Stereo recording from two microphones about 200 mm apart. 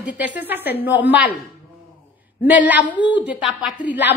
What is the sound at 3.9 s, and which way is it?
Speech, 60° left (ahead or behind).